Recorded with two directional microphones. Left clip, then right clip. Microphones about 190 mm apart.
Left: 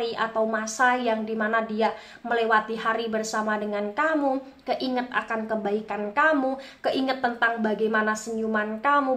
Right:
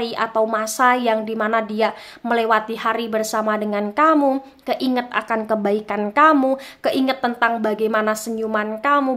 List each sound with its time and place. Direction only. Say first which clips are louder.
0.0 s a woman's voice: right 5 dB; 45° right (ahead or behind)